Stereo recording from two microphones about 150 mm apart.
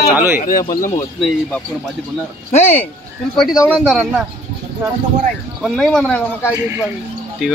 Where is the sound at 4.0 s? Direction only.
10° right (ahead or behind).